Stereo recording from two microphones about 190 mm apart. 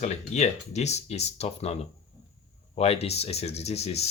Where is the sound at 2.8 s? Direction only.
35° left (ahead or behind).